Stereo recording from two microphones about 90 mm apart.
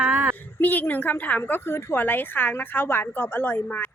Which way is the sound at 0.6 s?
20° left (ahead or behind).